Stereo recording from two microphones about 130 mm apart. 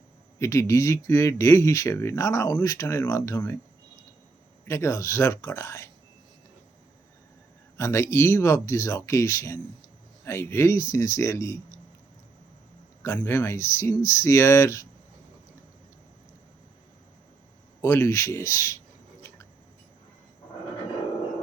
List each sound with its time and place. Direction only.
0.3 s speech: 20° left (ahead or behind)
4.7 s speech: 20° left (ahead or behind)
7.8 s speech: 20° left (ahead or behind)
13.0 s speech: 15° left (ahead or behind)
17.8 s speech: 20° left (ahead or behind)